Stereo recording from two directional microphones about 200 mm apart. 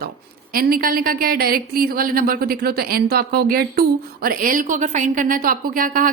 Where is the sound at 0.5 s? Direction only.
45° right (ahead or behind).